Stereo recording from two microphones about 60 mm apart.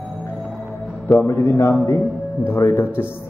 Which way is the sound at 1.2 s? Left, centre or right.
Left.